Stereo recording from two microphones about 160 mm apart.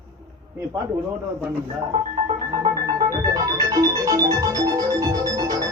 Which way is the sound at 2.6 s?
25° right (ahead or behind).